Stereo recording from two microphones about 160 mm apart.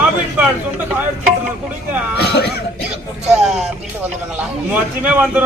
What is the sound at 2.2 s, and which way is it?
Speech, 90° left.